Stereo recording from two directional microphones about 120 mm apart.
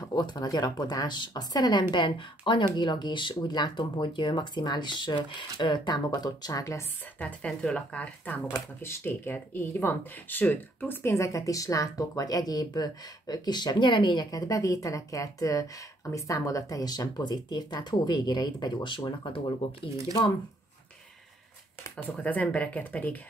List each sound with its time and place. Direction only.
0.0 s speech: 35° left (ahead or behind)
7.2 s speech: 10° left (ahead or behind); by 19.9 s 45° left (ahead or behind)
21.9 s speech: 10° left (ahead or behind)